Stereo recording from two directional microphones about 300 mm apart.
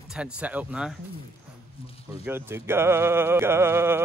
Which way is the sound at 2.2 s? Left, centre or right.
Centre.